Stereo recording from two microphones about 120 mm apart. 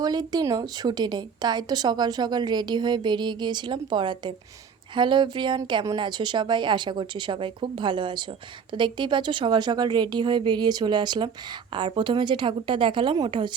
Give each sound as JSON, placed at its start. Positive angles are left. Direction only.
{"t": 0.0, "sound": "a woman's voice", "side_deg": -35}